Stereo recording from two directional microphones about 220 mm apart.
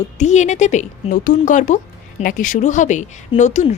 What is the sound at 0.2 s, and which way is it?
A woman's voice, 30° left (ahead or behind).